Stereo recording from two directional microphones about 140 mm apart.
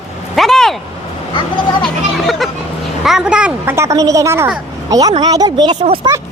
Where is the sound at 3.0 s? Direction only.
5° right (ahead or behind).